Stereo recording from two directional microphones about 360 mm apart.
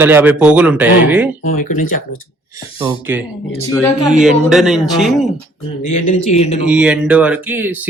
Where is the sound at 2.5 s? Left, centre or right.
Centre.